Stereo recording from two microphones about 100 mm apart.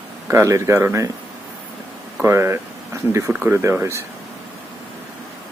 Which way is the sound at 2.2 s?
25° right (ahead or behind).